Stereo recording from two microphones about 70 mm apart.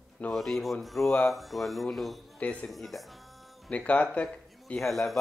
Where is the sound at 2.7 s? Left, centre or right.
Centre.